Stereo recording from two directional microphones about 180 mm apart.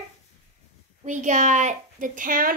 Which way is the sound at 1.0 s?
40° right (ahead or behind).